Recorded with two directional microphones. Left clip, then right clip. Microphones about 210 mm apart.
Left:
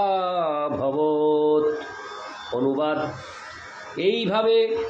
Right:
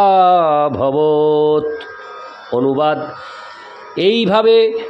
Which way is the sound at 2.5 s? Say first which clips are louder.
Right 9 dB; 50° right (ahead or behind).